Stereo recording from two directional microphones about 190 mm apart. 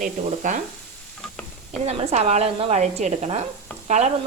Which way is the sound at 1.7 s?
35° right (ahead or behind).